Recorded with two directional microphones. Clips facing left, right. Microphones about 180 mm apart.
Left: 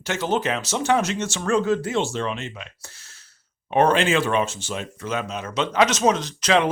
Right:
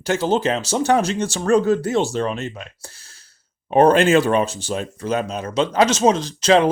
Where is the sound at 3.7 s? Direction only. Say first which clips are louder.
Right 5 dB; 40° right (ahead or behind).